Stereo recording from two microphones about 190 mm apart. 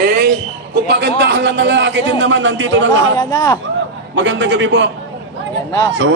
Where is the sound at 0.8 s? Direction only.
60° right (ahead or behind); by 3.0 s 80° right.